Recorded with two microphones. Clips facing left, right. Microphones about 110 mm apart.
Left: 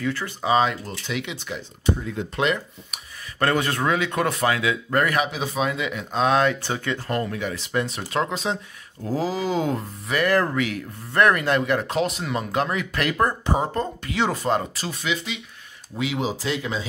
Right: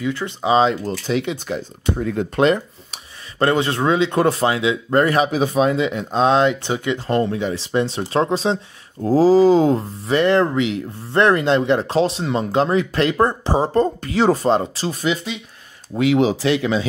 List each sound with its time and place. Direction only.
0.0 s speech: 20° right (ahead or behind)
1.0 s speech: 35° right (ahead or behind)
2.0 s speech: 55° right (ahead or behind)
2.4 s speech: 35° right (ahead or behind)
5.4 s speech: 45° right (ahead or behind)
16.0 s speech: 65° right (ahead or behind)